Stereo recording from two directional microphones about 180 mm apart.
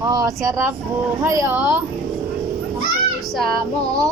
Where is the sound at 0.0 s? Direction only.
20° right (ahead or behind).